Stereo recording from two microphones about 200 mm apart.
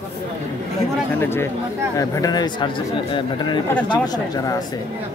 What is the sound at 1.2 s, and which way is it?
Speech, 10° left (ahead or behind).